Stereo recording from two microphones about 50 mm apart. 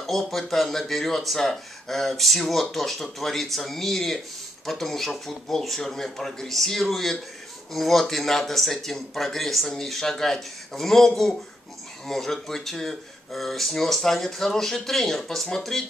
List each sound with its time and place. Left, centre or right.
0.0 s speech: centre